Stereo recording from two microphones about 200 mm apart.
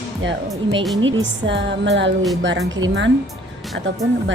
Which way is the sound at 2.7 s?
70° right (ahead or behind).